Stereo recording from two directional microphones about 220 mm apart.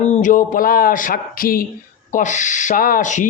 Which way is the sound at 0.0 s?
35° left (ahead or behind).